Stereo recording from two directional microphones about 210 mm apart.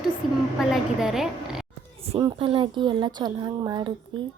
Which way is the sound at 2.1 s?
20° right (ahead or behind).